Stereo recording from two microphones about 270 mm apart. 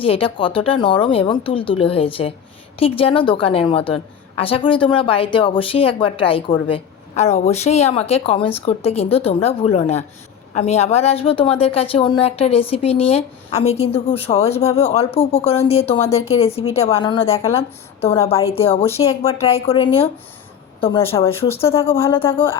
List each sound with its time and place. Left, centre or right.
0.0 s a woman's voice: centre